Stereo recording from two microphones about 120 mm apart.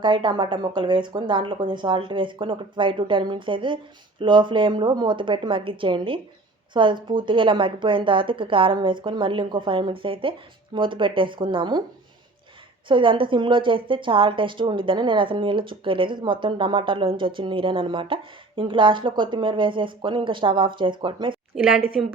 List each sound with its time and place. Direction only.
0.0 s a woman's voice: 40° right (ahead or behind)
12.9 s a woman's voice: 45° right (ahead or behind)
21.5 s a woman's voice: 5° right (ahead or behind)